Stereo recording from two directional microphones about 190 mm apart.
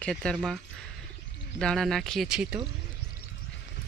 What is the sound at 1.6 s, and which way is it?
Speech, 5° left (ahead or behind).